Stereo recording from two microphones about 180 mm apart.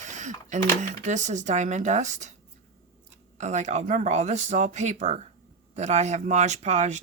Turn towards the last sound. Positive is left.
turn(degrees=-40)  # may be behind; listen again after turning